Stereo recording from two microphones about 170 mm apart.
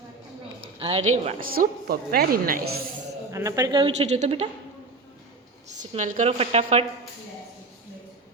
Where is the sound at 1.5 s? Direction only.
60° right (ahead or behind).